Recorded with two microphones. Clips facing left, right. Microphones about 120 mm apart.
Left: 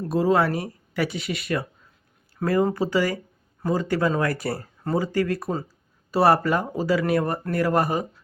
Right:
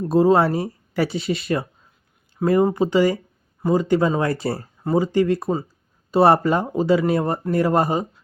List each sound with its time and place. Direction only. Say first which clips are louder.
0.0 s speech: right 5 dB; 30° right (ahead or behind)